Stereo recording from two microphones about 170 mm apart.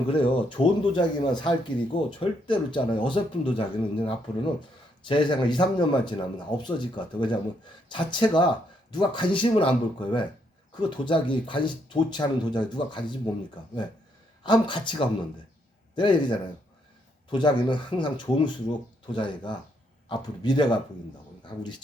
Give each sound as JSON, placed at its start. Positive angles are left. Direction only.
{"t": 0.1, "sound": "speech", "side_deg": 30}
{"t": 14.4, "sound": "speech", "side_deg": 25}